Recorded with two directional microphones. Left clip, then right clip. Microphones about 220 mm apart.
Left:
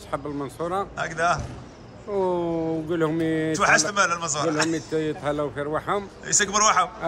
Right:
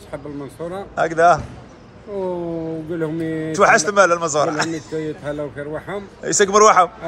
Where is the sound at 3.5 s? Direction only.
5° left (ahead or behind).